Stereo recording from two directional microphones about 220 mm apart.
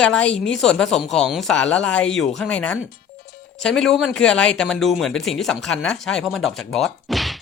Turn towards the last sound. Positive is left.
turn(degrees=0)  # may be behind; listen again after turning